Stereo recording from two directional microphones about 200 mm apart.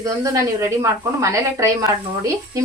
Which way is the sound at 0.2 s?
15° right (ahead or behind).